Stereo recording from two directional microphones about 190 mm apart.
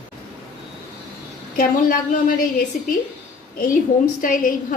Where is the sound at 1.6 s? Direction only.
50° left (ahead or behind).